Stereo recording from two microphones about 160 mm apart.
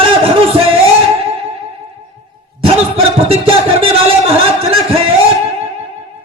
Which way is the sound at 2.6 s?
35° right (ahead or behind).